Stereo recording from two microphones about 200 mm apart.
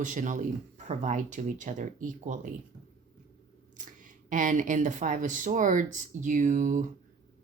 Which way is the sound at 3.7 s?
40° right (ahead or behind).